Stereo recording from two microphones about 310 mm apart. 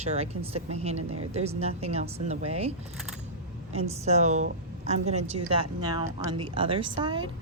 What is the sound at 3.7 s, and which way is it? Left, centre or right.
A woman's voice, right.